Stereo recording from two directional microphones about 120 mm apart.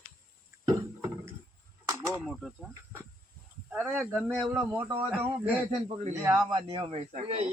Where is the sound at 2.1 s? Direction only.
Centre (ahead or behind).